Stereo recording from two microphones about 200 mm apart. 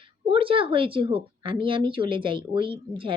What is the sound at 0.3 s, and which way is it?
Speech, 25° right (ahead or behind).